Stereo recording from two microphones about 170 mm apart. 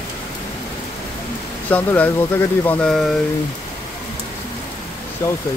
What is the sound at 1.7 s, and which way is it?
Speech, 10° left (ahead or behind).